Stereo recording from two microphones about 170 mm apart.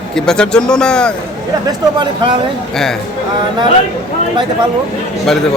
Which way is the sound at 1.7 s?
25° right (ahead or behind).